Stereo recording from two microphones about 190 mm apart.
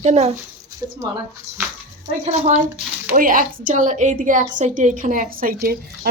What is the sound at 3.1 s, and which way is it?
A woman's voice, 45° right (ahead or behind).